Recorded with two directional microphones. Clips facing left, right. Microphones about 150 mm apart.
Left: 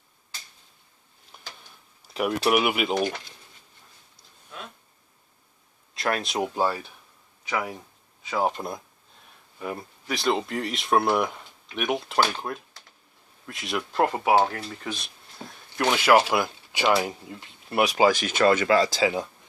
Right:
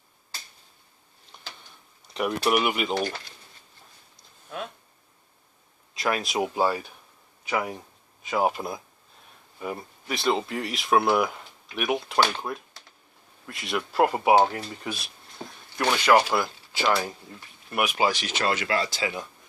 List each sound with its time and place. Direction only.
2.1 s speech: 5° left (ahead or behind)
5.9 s speech: centre (ahead or behind)
16.2 s speech: 15° left (ahead or behind)
18.0 s speech: 50° left (ahead or behind)
18.9 s speech: 30° left (ahead or behind)